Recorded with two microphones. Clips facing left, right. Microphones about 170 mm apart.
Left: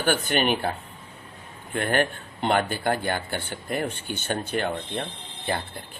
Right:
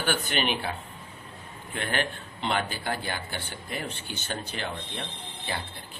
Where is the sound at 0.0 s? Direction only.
45° left (ahead or behind).